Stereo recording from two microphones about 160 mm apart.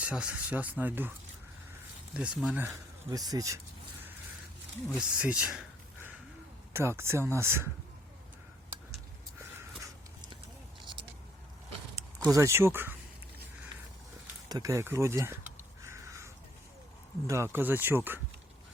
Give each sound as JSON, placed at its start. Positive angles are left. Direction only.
{"t": 0.0, "sound": "speech", "side_deg": -5}
{"t": 2.1, "sound": "speech", "side_deg": -5}
{"t": 2.6, "sound": "speech", "side_deg": -25}
{"t": 4.9, "sound": "speech", "side_deg": -5}
{"t": 9.4, "sound": "a sound", "side_deg": -20}
{"t": 12.2, "sound": "speech", "side_deg": -20}
{"t": 14.5, "sound": "speech", "side_deg": -20}
{"t": 15.8, "sound": "crow", "side_deg": -20}
{"t": 17.2, "sound": "speech", "side_deg": -15}